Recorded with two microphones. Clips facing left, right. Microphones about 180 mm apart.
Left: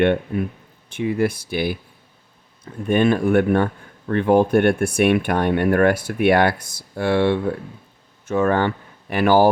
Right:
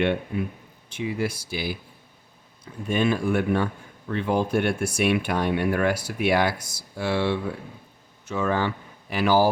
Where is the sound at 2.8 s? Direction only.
55° left (ahead or behind).